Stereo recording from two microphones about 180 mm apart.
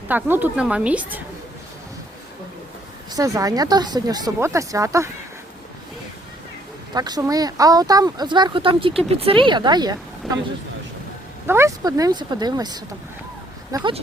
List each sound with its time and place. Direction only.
0.1 s a woman's voice: 10° right (ahead or behind)
3.1 s speech: 20° right (ahead or behind)
6.9 s speech: 20° right (ahead or behind)
11.4 s speech: 15° right (ahead or behind)